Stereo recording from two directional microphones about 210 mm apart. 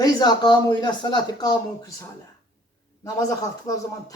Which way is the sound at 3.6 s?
15° left (ahead or behind).